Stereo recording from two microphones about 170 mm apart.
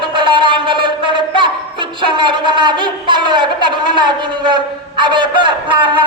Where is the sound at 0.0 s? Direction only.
30° right (ahead or behind).